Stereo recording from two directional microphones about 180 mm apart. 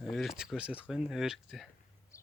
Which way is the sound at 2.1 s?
15° left (ahead or behind).